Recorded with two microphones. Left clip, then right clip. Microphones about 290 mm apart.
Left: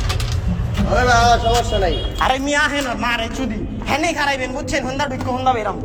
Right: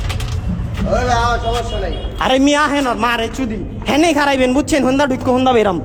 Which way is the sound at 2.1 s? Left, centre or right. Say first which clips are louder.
Right 5 dB; right.